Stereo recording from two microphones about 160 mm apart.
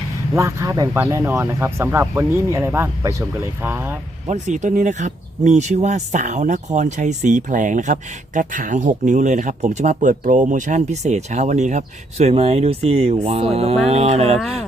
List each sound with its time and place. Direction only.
0.3 s speech: 20° right (ahead or behind)
4.3 s speech: 50° right (ahead or behind)